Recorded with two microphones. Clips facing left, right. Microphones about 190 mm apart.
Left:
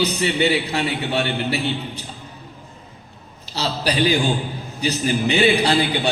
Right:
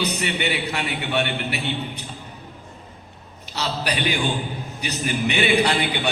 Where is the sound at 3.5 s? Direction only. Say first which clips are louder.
Left 3 dB; 30° left (ahead or behind).